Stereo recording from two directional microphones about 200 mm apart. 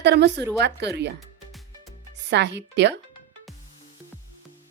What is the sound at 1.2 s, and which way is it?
Music, centre (ahead or behind).